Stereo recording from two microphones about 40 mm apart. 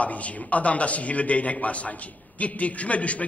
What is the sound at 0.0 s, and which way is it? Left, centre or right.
A man's voice, left.